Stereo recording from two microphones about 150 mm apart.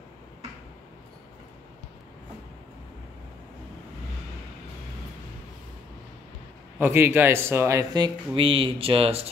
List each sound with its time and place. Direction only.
6.8 s speech: 15° right (ahead or behind); by 9.2 s 40° right (ahead or behind)